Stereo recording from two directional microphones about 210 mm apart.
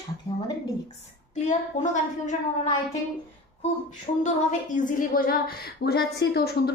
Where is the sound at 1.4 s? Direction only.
35° left (ahead or behind).